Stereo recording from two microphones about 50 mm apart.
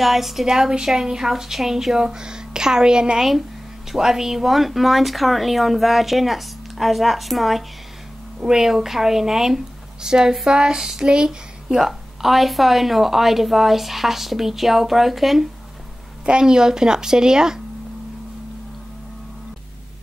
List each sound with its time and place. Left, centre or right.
0.0 s a woman's voice: centre
16.3 s a woman's voice: centre